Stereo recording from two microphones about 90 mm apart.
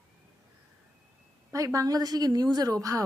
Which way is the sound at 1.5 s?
40° right (ahead or behind).